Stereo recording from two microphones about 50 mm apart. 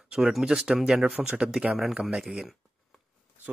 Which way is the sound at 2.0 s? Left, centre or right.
Centre.